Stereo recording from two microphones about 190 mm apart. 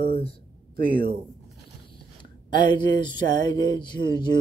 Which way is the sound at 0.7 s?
50° right (ahead or behind).